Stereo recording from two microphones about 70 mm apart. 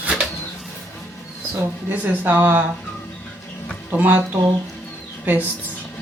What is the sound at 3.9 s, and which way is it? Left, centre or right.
Speech, right.